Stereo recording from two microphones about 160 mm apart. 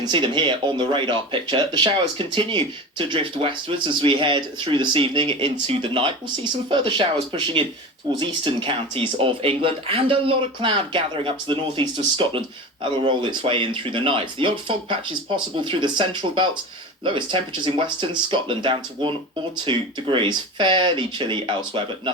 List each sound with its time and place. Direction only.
0.0 s speech: 30° right (ahead or behind)